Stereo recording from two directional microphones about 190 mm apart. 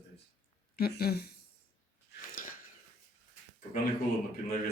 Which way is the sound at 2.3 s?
45° left (ahead or behind).